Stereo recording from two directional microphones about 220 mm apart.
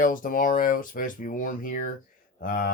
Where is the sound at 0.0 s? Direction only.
40° left (ahead or behind).